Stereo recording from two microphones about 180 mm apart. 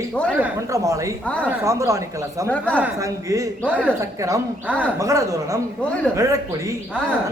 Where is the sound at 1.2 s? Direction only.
10° left (ahead or behind).